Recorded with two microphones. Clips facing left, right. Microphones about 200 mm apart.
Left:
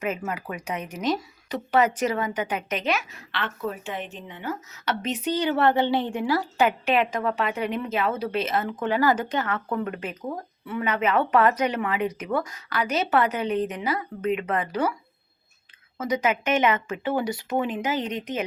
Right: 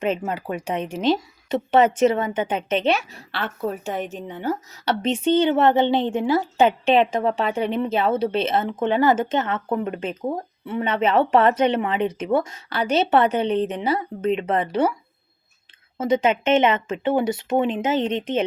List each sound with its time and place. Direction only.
0.0 s speech: 30° right (ahead or behind)
16.0 s speech: 25° right (ahead or behind)